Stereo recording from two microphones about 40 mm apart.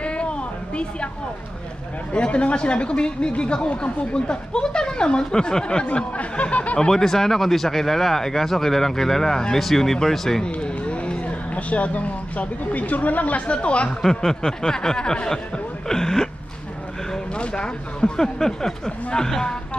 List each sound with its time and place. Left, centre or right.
0.0 s a sound: left
2.1 s speech: left
6.1 s speech: left
6.9 s speech: centre
10.4 s speech: left
14.4 s speech: centre
15.9 s a sound: centre
17.4 s speech: left